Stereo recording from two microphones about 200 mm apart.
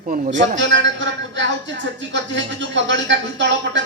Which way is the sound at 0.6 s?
65° right (ahead or behind).